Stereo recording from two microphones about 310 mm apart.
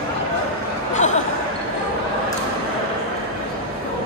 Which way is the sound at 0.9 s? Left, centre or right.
Left.